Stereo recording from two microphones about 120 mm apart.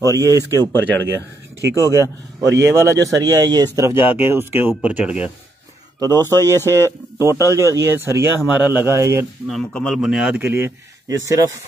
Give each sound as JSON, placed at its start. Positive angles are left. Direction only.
{"t": 0.1, "sound": "speech", "side_deg": -30}
{"t": 0.5, "sound": "speech", "side_deg": 15}
{"t": 1.0, "sound": "speech", "side_deg": -20}
{"t": 6.2, "sound": "speech", "side_deg": 20}
{"t": 7.2, "sound": "speech", "side_deg": -25}
{"t": 9.5, "sound": "a man's voice", "side_deg": 5}
{"t": 10.4, "sound": "speech", "side_deg": -20}